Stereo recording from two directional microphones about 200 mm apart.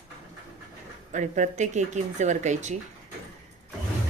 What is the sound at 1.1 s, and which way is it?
A woman's voice, 40° right (ahead or behind).